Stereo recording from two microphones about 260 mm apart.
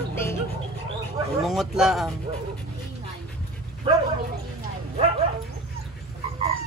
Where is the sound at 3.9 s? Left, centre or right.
Centre.